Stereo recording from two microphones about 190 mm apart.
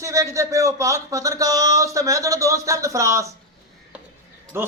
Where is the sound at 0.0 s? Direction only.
15° right (ahead or behind).